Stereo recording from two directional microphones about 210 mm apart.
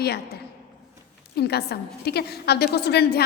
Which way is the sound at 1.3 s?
50° left (ahead or behind).